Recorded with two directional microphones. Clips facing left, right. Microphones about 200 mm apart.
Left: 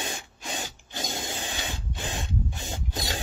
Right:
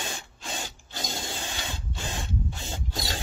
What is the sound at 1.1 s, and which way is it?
Spray, 15° left (ahead or behind).